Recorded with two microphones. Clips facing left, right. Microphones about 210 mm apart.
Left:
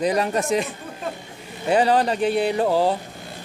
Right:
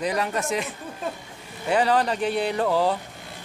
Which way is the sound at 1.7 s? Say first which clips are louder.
Left 3 dB; 30° left (ahead or behind).